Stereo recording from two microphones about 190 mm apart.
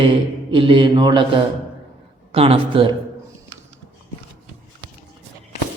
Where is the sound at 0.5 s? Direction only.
25° right (ahead or behind).